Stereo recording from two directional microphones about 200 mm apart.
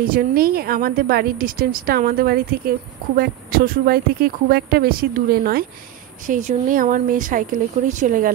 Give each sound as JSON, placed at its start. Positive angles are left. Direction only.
{"t": 0.0, "sound": "a woman's voice", "side_deg": -45}